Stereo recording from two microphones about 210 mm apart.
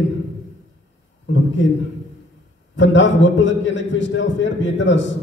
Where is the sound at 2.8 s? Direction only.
60° left (ahead or behind).